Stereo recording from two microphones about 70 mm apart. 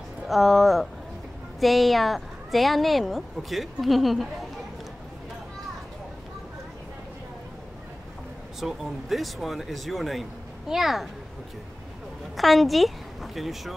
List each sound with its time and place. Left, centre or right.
0.3 s a woman's voice: centre
8.5 s a woman's voice: centre
12.4 s a woman's voice: centre